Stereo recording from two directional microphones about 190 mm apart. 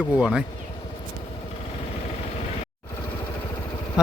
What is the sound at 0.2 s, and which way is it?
Speech, 5° right (ahead or behind).